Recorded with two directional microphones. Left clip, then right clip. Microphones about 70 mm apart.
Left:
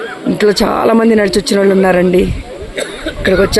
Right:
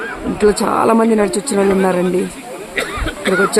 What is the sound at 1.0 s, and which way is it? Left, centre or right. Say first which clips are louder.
Speech: left 4 dB; left.